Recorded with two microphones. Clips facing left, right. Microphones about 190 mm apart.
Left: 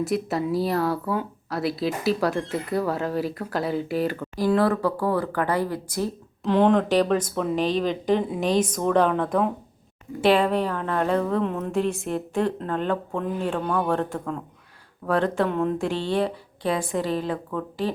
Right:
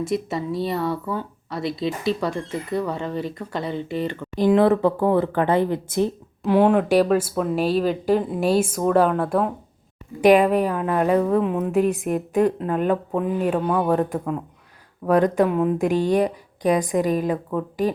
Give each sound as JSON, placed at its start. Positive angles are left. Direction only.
{"t": 0.0, "sound": "speech", "side_deg": 0}
{"t": 4.4, "sound": "speech", "side_deg": -20}
{"t": 6.5, "sound": "a woman's voice", "side_deg": -10}